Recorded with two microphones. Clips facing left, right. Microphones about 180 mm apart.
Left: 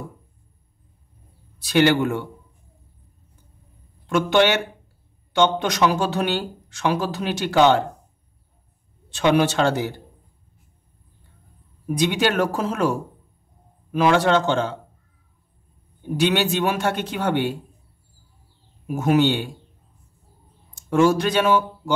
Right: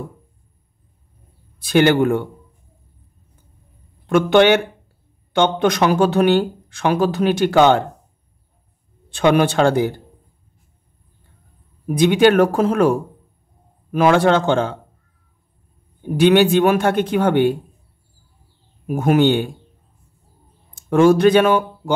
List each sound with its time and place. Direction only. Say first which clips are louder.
1.6 s speech: right 4 dB; 50° right (ahead or behind)
4.1 s speech: right 5 dB; 55° right (ahead or behind)
9.1 s speech: right 3 dB; 55° right (ahead or behind)
12.0 s speech: right 8 dB; 55° right (ahead or behind)
13.9 s speech: right 3 dB; 55° right (ahead or behind)
16.2 s speech: right 8 dB; 55° right (ahead or behind)
18.9 s speech: right 4 dB; 55° right (ahead or behind)
20.7 s speech: right 5 dB; 55° right (ahead or behind)